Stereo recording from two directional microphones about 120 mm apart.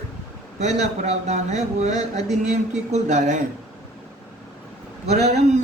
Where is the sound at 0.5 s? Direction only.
70° right (ahead or behind); by 3.4 s 90° right.